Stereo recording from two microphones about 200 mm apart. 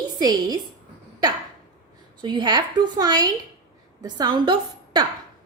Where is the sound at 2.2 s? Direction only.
20° right (ahead or behind).